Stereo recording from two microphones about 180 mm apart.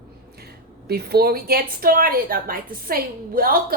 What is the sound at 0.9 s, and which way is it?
A woman's voice, 60° right (ahead or behind).